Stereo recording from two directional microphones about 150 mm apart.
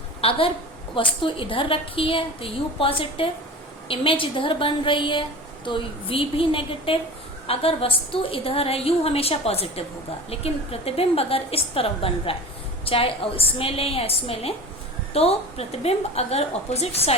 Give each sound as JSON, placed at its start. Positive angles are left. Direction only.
{"t": 0.2, "sound": "a woman's voice", "side_deg": 40}